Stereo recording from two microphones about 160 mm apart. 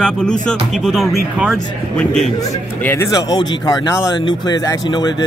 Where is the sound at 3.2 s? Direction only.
25° left (ahead or behind).